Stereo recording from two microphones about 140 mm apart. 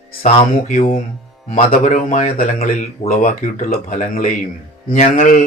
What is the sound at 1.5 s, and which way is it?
Speech, 70° left (ahead or behind).